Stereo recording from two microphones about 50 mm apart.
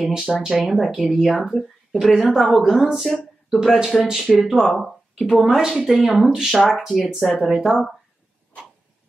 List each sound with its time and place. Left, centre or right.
0.0 s speech: centre
5.6 s speech: centre
5.9 s speech: centre